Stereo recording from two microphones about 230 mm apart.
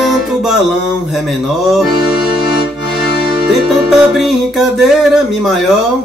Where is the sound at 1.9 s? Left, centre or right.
Centre.